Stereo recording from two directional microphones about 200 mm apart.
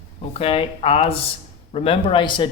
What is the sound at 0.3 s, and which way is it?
A man's voice, 25° left (ahead or behind).